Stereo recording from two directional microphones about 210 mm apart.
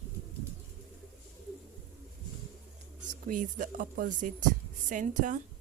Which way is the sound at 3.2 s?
40° right (ahead or behind).